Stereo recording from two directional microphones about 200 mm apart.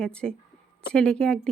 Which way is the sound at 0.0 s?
5° left (ahead or behind).